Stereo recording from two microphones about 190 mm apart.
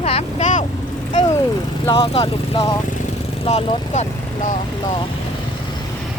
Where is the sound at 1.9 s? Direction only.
25° left (ahead or behind).